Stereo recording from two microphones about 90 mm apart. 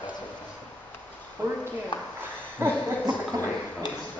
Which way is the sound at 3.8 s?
55° left (ahead or behind).